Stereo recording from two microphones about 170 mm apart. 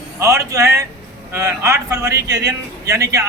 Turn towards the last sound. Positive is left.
turn(degrees=-20)  # may be behind; listen again after turning